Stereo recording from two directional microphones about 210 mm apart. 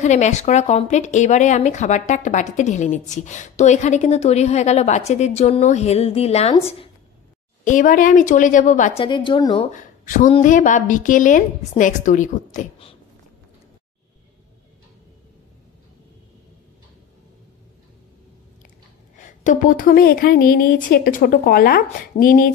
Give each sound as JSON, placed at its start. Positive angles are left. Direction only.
{"t": 0.0, "sound": "speech", "side_deg": 35}
{"t": 7.6, "sound": "speech", "side_deg": 40}
{"t": 9.0, "sound": "a woman's voice", "side_deg": 20}
{"t": 9.7, "sound": "speech", "side_deg": 35}
{"t": 19.1, "sound": "a woman's voice", "side_deg": 35}